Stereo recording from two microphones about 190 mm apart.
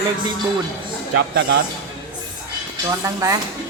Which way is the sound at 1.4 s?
55° right (ahead or behind).